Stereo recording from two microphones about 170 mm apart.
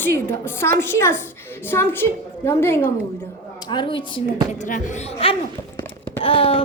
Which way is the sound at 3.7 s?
30° left (ahead or behind).